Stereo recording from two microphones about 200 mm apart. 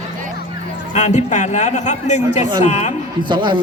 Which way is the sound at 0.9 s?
35° left (ahead or behind).